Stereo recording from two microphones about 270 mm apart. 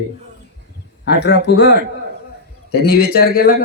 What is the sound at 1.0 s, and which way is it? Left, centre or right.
Speech, left.